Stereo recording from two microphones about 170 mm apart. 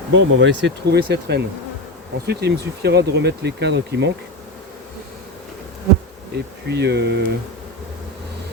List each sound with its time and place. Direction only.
0.1 s speech: 90° right
6.3 s speech: 75° right (ahead or behind)